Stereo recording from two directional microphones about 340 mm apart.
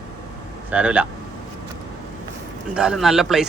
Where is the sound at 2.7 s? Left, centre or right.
Centre.